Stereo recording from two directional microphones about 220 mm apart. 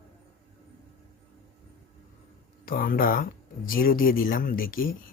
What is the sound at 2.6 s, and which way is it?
A man's voice, 40° left (ahead or behind).